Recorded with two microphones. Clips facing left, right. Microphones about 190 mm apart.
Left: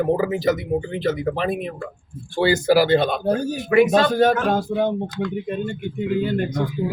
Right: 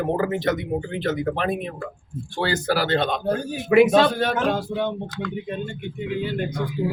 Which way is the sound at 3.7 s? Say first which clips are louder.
Right 1 dB; 15° right (ahead or behind).